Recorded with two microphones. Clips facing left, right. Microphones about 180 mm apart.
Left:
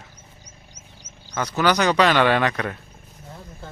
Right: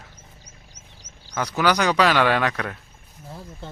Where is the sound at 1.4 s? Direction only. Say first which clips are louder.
Left 1 dB; 10° right (ahead or behind).